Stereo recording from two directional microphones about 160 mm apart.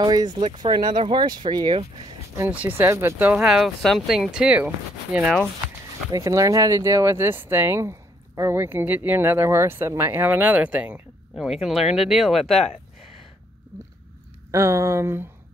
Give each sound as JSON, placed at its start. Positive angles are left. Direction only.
{"t": 0.0, "sound": "speech", "side_deg": -25}
{"t": 0.4, "sound": "speech", "side_deg": -35}
{"t": 2.3, "sound": "speech", "side_deg": -15}
{"t": 6.1, "sound": "speech", "side_deg": -20}
{"t": 14.5, "sound": "speech", "side_deg": -15}